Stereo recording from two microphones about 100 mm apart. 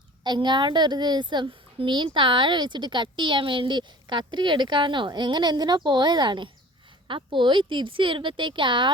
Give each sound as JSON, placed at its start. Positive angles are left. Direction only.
{"t": 0.3, "sound": "a woman's voice", "side_deg": -50}